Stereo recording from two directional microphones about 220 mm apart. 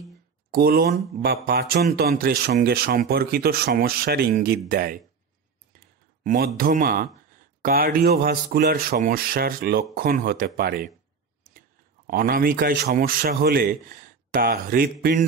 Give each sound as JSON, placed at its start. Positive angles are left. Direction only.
{"t": 0.5, "sound": "speech", "side_deg": -45}
{"t": 6.2, "sound": "speech", "side_deg": -45}
{"t": 12.1, "sound": "speech", "side_deg": -40}